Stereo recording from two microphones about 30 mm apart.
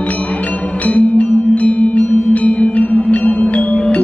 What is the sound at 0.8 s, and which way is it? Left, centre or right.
Music, left.